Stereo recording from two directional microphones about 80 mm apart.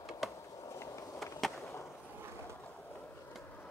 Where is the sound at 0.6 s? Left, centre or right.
Left.